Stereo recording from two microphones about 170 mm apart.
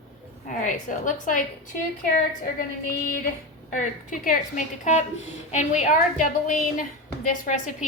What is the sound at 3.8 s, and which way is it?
A woman's voice, 50° left (ahead or behind).